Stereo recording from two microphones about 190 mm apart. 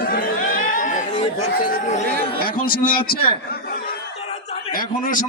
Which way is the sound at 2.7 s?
50° left (ahead or behind).